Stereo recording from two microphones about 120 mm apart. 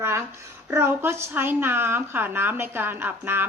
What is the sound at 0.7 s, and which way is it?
A woman's voice, 20° right (ahead or behind).